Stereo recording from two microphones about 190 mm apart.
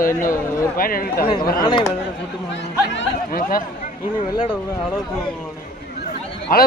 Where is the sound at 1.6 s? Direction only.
25° left (ahead or behind).